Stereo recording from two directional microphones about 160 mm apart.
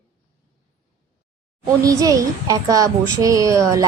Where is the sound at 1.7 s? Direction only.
20° right (ahead or behind).